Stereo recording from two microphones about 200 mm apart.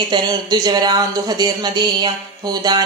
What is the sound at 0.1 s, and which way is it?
Speech, 20° right (ahead or behind).